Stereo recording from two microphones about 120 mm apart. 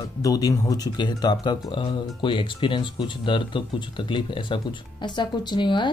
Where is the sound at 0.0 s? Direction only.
30° left (ahead or behind).